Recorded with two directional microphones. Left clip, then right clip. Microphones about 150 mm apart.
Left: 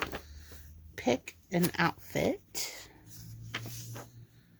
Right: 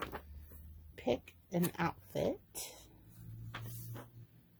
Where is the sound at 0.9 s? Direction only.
40° left (ahead or behind).